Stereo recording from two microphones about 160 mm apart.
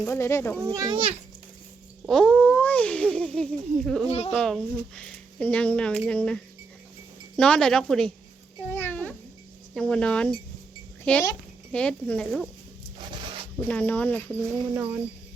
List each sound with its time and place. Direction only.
0.0 s speech: 15° left (ahead or behind)
0.6 s a child's voice: 20° right (ahead or behind)
2.0 s speech: 5° left (ahead or behind)
8.7 s babbling: 10° left (ahead or behind)
9.7 s speech: 5° left (ahead or behind)
13.7 s speech: 10° left (ahead or behind)